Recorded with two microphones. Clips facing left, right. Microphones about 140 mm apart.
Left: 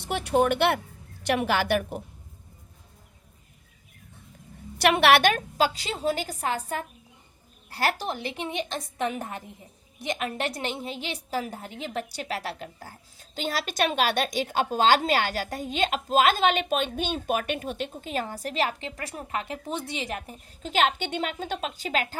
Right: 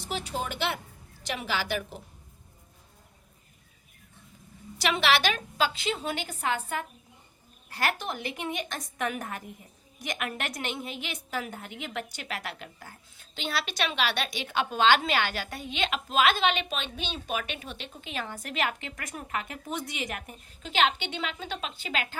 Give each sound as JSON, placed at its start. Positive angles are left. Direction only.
{"t": 0.0, "sound": "a woman's voice", "side_deg": 65}
{"t": 4.8, "sound": "a woman's voice", "side_deg": 60}
{"t": 7.7, "sound": "a woman's voice", "side_deg": 35}